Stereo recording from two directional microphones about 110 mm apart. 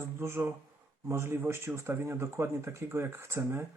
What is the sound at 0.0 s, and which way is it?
Speech, 20° right (ahead or behind).